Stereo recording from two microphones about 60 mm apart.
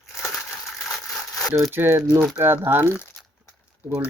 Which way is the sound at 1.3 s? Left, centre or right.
Left.